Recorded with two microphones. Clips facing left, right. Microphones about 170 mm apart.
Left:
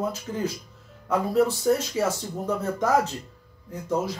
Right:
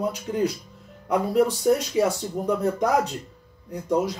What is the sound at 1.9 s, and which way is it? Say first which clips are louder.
Speech: right 3 dB; 15° right (ahead or behind).